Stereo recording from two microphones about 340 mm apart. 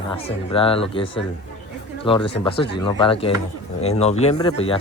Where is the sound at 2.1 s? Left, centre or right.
Centre.